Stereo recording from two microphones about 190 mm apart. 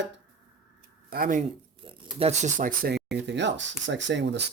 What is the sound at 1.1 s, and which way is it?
Speech, 50° right (ahead or behind).